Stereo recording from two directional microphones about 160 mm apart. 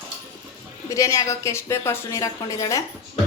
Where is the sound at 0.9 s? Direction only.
20° left (ahead or behind).